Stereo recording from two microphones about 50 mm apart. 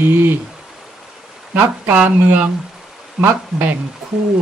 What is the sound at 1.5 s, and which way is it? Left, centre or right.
Speech, right.